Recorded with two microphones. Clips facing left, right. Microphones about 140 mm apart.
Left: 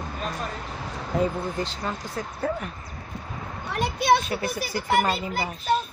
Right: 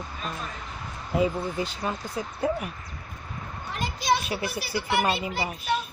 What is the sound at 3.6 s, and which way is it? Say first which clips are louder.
Speech: left 4 dB; 65° left (ahead or behind).